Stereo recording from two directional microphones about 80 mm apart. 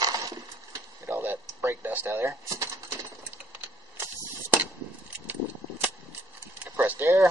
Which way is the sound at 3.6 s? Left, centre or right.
Right.